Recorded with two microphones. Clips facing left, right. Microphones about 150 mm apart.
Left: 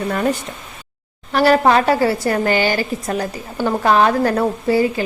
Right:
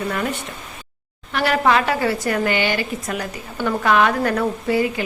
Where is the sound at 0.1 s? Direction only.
35° left (ahead or behind).